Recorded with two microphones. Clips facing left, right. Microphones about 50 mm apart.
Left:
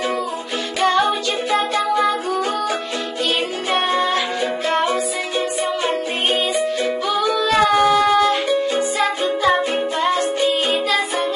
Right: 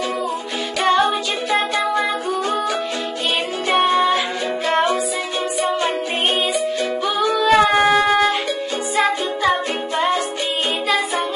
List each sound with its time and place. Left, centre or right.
0.7 s music: centre
7.2 s music: centre
7.4 s a sound: centre
8.1 s music: centre
10.0 s music: centre